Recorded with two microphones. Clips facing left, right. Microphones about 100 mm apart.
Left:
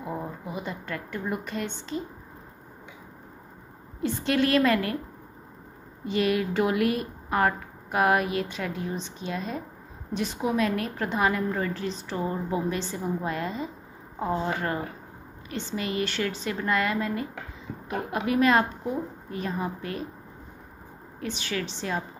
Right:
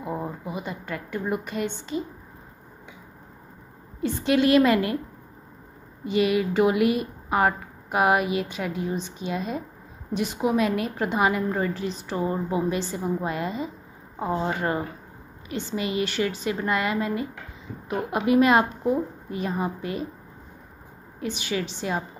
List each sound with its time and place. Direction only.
0.0 s a woman's voice: 5° right (ahead or behind)
4.0 s a woman's voice: 5° right (ahead or behind)
6.0 s a woman's voice: 5° right (ahead or behind)
15.5 s a woman's voice: 10° right (ahead or behind)
21.2 s a woman's voice: 10° right (ahead or behind)